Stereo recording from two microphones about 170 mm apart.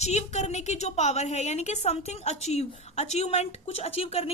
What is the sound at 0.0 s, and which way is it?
A woman's voice, 40° left (ahead or behind).